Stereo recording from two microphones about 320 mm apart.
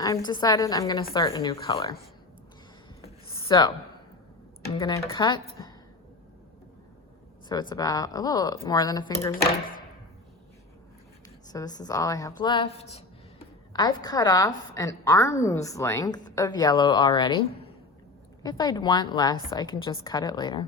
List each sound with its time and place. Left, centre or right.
0.3 s a woman's voice: centre
3.5 s a woman's voice: centre
4.8 s a woman's voice: centre
7.4 s a woman's voice: centre
11.5 s a woman's voice: centre
18.4 s a woman's voice: centre